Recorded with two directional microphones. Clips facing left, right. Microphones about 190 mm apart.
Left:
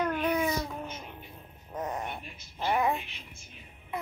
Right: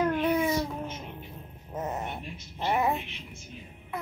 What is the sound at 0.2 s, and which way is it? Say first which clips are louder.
Babbling: right 3 dB; 10° right (ahead or behind).